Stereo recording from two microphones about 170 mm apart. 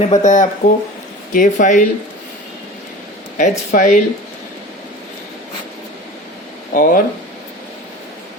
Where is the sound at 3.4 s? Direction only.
50° left (ahead or behind).